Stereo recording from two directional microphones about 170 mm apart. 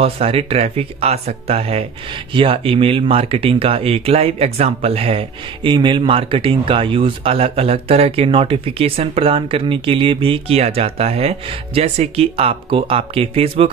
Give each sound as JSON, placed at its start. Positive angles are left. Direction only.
{"t": 0.0, "sound": "speech", "side_deg": -35}